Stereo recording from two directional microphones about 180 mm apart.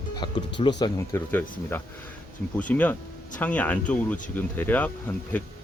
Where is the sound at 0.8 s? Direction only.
15° left (ahead or behind).